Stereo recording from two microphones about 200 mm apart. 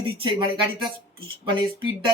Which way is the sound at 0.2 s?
25° right (ahead or behind).